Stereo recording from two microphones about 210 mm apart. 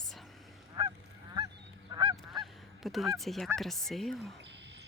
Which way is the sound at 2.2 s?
Centre (ahead or behind).